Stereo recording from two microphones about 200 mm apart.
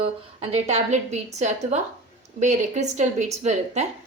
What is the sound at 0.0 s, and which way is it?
A woman's voice, 30° right (ahead or behind).